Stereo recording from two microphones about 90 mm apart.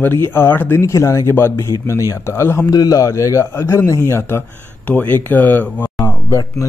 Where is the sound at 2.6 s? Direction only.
40° left (ahead or behind); by 5.9 s 20° left (ahead or behind).